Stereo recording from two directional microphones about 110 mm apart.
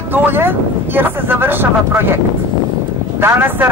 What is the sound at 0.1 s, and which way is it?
Speech, 20° right (ahead or behind).